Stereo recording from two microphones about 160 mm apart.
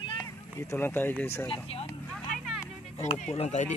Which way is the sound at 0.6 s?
15° left (ahead or behind).